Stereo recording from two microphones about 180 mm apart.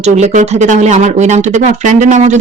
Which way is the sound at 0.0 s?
40° right (ahead or behind).